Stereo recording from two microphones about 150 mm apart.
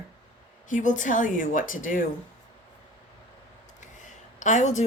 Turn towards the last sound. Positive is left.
turn(degrees=50)  # may be behind; listen again after turning